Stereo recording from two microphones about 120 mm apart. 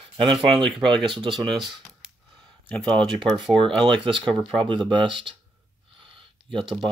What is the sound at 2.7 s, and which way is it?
Speech, 10° left (ahead or behind).